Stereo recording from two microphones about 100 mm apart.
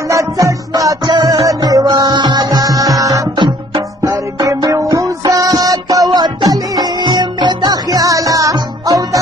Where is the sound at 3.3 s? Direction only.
50° right (ahead or behind).